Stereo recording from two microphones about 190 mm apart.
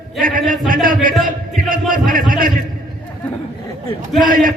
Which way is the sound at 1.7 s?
45° right (ahead or behind).